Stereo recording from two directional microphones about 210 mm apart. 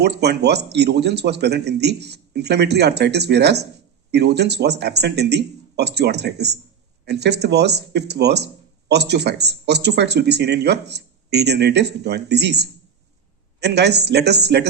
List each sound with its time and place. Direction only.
0.0 s speech: 50° right (ahead or behind)